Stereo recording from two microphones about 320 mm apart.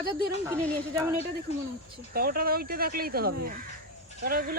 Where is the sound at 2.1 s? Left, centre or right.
Right.